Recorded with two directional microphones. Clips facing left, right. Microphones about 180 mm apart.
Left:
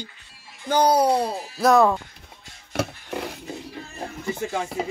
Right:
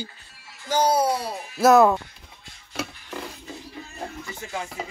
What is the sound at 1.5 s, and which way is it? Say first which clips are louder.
Speech: right 2 dB; 5° right (ahead or behind).